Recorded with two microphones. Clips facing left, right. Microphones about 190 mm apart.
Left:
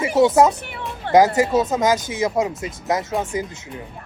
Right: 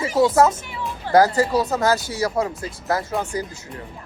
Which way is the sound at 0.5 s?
65° left (ahead or behind).